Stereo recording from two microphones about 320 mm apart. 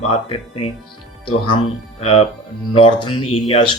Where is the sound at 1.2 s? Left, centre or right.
Centre.